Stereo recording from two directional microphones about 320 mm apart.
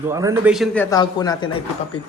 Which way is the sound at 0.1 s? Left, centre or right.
Centre.